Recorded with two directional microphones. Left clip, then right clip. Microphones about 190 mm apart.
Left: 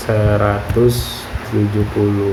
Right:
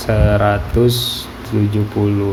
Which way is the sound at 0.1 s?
35° right (ahead or behind).